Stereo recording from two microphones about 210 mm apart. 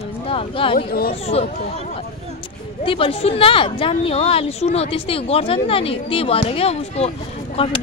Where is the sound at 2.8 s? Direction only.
25° left (ahead or behind).